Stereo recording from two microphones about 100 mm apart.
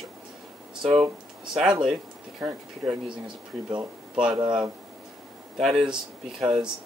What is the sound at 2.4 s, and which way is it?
Speech, 25° right (ahead or behind).